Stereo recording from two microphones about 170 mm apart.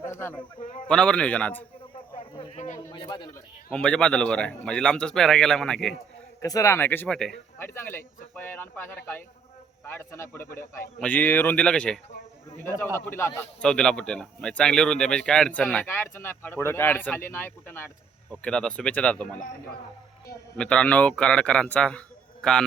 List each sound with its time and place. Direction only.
0.1 s a sound: 15° left (ahead or behind)
0.6 s a man's voice: 45° left (ahead or behind)
0.9 s speech: 5° left (ahead or behind)
2.1 s a sound: 30° left (ahead or behind)
2.6 s a man's voice: 45° left (ahead or behind)
2.9 s speech: 25° left (ahead or behind)
3.7 s a man's voice: 5° left (ahead or behind)
6.4 s a man's voice: 20° left (ahead or behind)
20.6 s a man's voice: 5° left (ahead or behind)